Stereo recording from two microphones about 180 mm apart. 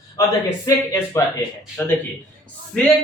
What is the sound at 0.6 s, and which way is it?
Speech, 20° left (ahead or behind).